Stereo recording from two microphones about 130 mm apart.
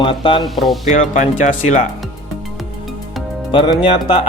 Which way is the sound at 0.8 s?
70° left (ahead or behind).